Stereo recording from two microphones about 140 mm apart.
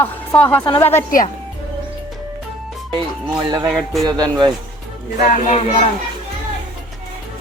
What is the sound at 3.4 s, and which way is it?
Music, 30° right (ahead or behind).